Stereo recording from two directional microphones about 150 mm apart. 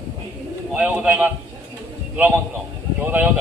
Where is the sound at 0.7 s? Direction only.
10° right (ahead or behind).